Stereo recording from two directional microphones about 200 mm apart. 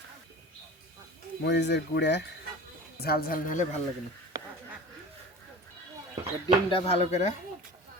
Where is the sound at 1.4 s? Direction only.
60° left (ahead or behind); by 3.7 s 40° left (ahead or behind).